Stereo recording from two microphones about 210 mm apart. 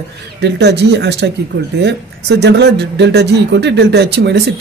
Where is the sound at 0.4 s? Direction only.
55° right (ahead or behind).